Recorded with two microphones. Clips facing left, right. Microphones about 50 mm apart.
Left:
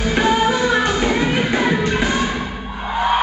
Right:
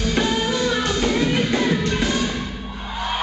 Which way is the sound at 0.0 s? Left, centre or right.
Centre.